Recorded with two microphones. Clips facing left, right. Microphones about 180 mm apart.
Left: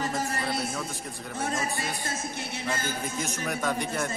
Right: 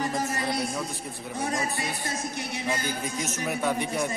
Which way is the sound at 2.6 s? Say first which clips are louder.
Right 2 dB; 15° right (ahead or behind).